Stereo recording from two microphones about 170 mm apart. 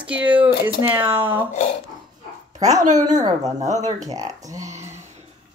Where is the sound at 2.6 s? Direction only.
45° right (ahead or behind).